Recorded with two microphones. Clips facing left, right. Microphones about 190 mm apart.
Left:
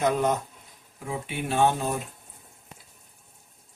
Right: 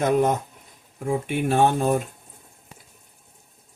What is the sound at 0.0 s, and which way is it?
Speech, 50° right (ahead or behind).